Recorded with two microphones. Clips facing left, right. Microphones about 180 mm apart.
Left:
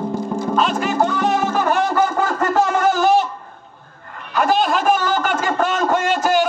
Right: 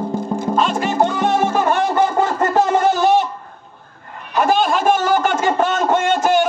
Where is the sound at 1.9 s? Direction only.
20° right (ahead or behind).